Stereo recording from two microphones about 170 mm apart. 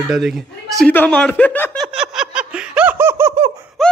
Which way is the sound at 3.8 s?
Centre (ahead or behind).